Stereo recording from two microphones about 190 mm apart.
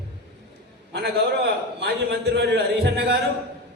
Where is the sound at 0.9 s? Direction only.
60° right (ahead or behind).